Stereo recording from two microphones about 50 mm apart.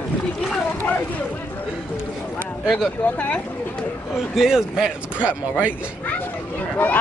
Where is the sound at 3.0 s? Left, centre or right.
Left.